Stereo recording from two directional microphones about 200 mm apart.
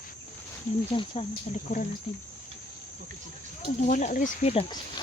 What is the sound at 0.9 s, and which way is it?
Speech, 30° left (ahead or behind).